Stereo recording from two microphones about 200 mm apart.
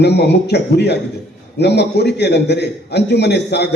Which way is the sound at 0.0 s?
55° left (ahead or behind).